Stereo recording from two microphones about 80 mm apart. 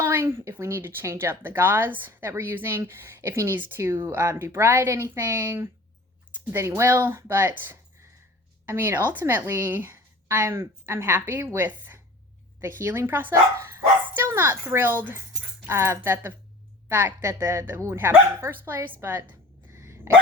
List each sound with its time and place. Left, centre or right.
0.0 s a woman's voice: right